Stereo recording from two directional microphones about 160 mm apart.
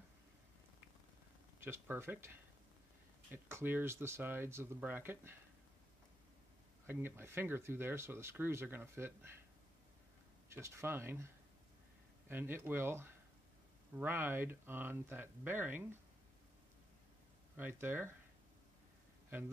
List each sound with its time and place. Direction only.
1.6 s speech: 15° right (ahead or behind)
6.9 s speech: 15° right (ahead or behind)
10.5 s speech: 15° right (ahead or behind)
12.3 s speech: 15° right (ahead or behind)
17.6 s speech: 10° right (ahead or behind)